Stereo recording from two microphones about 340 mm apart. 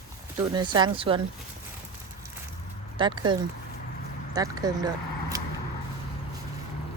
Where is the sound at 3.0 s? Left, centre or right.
Centre.